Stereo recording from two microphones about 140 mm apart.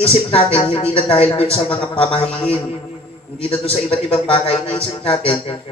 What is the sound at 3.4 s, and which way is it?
A man's voice, 40° left (ahead or behind).